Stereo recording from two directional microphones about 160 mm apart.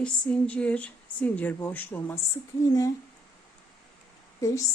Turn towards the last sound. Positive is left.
turn(degrees=20)  # may be behind; listen again after turning